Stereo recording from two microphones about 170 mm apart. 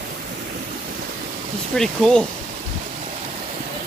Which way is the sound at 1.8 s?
5° left (ahead or behind).